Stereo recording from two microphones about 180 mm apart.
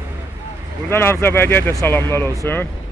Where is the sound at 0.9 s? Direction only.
15° left (ahead or behind).